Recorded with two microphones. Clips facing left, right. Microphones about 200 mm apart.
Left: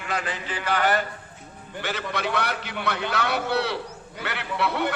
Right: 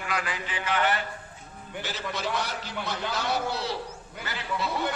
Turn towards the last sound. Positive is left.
turn(degrees=65)  # may be behind; listen again after turning